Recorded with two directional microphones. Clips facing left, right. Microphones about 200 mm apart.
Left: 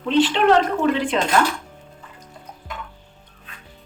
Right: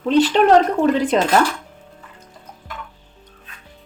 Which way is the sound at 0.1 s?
40° right (ahead or behind).